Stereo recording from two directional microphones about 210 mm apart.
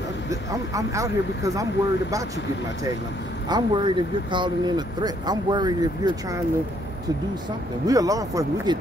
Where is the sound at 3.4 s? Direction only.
20° right (ahead or behind).